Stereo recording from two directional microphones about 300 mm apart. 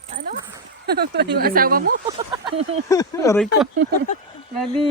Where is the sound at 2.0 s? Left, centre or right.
Centre.